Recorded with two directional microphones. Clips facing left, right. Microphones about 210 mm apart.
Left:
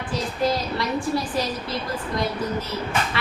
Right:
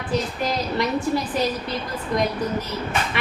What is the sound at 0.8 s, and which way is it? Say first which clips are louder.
Speech: right 2 dB; 20° right (ahead or behind).